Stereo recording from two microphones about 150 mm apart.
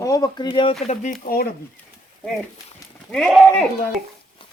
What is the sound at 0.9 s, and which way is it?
Speech, 60° left (ahead or behind).